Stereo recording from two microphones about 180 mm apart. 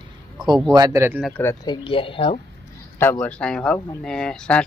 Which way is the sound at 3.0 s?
10° left (ahead or behind).